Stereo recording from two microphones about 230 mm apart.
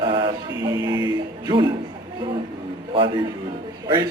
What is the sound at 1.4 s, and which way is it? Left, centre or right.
Speech, centre.